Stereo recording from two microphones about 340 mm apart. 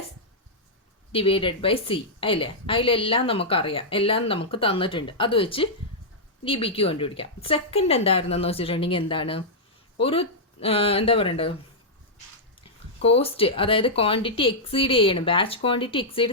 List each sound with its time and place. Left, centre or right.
1.1 s a woman's voice: centre
13.0 s a woman's voice: centre